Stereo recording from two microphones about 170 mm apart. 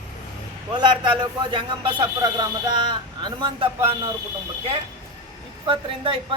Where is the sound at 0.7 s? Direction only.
25° right (ahead or behind).